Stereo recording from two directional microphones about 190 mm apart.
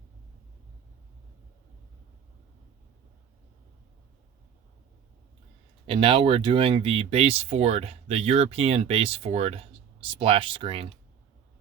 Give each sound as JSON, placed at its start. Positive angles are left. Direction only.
{"t": 5.8, "sound": "speech", "side_deg": -30}